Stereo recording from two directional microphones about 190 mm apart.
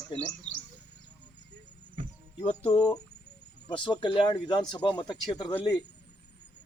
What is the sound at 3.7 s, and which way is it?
Speech, 25° left (ahead or behind).